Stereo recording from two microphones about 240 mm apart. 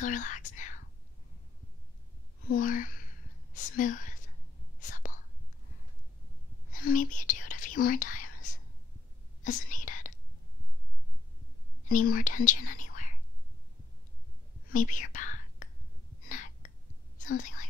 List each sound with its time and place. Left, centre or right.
0.0 s speech: left
2.4 s speech: left
4.7 s whispering: left
6.7 s whispering: left
11.9 s speech: left
12.4 s whispering: left
14.7 s whispering: left
17.4 s speech: left